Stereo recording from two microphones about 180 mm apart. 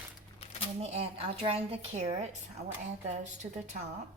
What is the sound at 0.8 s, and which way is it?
A woman's voice, 35° right (ahead or behind).